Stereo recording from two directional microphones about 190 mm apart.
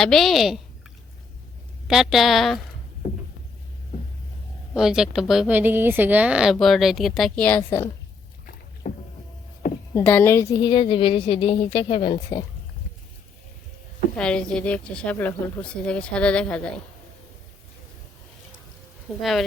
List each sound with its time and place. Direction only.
0.0 s speech: centre (ahead or behind)
1.9 s speech: centre (ahead or behind)
4.7 s speech: 5° right (ahead or behind)
8.8 s rowboat: 45° left (ahead or behind)
9.9 s a woman's voice: 10° left (ahead or behind)
14.2 s speech: 5° left (ahead or behind)
19.2 s speech: centre (ahead or behind)